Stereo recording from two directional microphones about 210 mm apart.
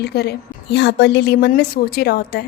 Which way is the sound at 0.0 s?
50° left (ahead or behind).